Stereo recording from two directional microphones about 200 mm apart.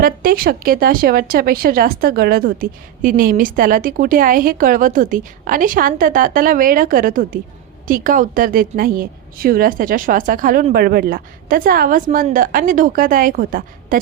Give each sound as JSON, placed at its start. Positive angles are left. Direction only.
{"t": 0.0, "sound": "speech", "side_deg": -45}